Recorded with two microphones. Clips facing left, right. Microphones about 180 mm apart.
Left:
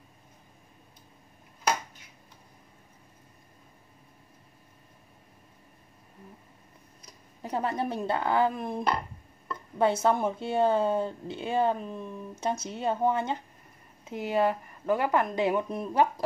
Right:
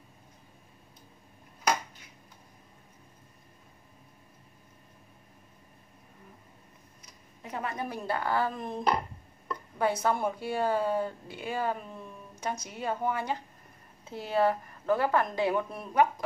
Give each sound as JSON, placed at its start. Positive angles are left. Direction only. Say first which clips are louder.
{"t": 7.0, "sound": "a woman's voice", "louder": "left 8 dB", "side_deg": 35}
{"t": 9.8, "sound": "a woman's voice", "louder": "left 4 dB", "side_deg": 25}
{"t": 15.9, "sound": "speech", "louder": "even", "side_deg": 30}